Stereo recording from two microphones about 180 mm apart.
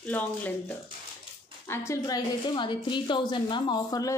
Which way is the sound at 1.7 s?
15° left (ahead or behind).